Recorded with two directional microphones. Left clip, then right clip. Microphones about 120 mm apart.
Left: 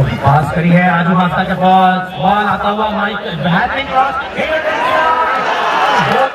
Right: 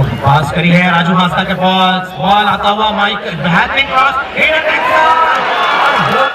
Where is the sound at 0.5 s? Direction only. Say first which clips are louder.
Right 2 dB; 20° right (ahead or behind).